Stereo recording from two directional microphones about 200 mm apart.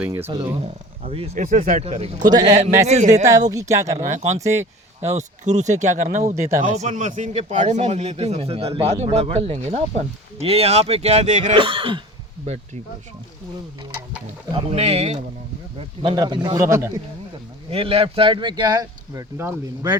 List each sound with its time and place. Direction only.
0.0 s speech: 10° right (ahead or behind)
0.6 s a man's voice: 30° right (ahead or behind)
2.5 s a man's voice: 35° right (ahead or behind)
3.5 s speech: 15° right (ahead or behind)
4.0 s a man's voice: 35° right (ahead or behind)
14.5 s a man's voice: 30° right (ahead or behind); by 16.9 s 15° right (ahead or behind)
17.7 s speech: 30° right (ahead or behind)